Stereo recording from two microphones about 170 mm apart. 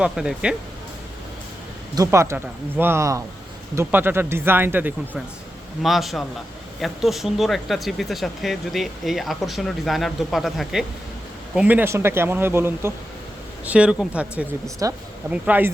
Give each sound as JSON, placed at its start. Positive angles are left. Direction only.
{"t": 0.0, "sound": "speech", "side_deg": -5}
{"t": 2.0, "sound": "speech", "side_deg": -15}
{"t": 14.8, "sound": "speech", "side_deg": -20}